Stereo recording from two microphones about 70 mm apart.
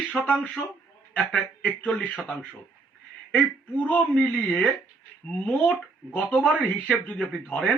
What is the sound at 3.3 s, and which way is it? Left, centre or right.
Speech, left.